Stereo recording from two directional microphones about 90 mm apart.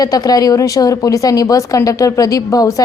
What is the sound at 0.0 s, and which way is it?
A woman's voice, 45° left (ahead or behind).